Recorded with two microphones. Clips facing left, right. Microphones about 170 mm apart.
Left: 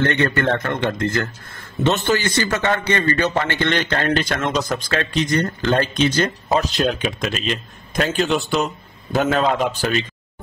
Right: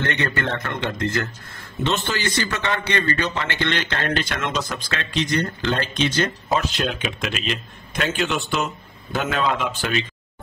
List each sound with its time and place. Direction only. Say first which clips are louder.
0.1 s a man's voice: left 6 dB; 50° left (ahead or behind)